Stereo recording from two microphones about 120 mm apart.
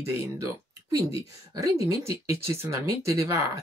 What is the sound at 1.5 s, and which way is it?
Speech, 30° right (ahead or behind).